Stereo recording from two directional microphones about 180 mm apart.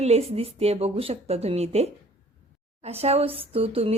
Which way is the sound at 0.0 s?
35° right (ahead or behind).